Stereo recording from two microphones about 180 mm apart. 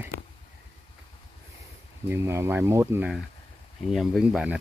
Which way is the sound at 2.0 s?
15° right (ahead or behind).